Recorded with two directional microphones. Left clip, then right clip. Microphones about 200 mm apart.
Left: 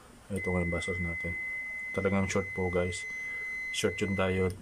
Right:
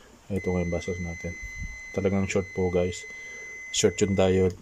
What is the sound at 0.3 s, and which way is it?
Speech, 15° right (ahead or behind).